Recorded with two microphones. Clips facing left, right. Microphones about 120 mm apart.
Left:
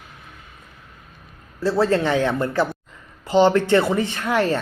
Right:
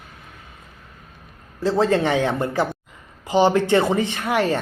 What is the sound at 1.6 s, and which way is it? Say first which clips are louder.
Speech: even; 20° right (ahead or behind).